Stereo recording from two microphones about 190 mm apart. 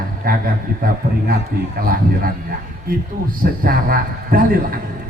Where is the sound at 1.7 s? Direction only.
50° right (ahead or behind).